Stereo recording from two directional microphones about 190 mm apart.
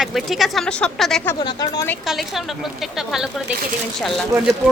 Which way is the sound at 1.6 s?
20° left (ahead or behind).